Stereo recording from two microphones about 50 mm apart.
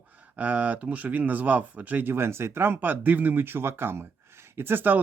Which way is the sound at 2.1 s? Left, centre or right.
Right.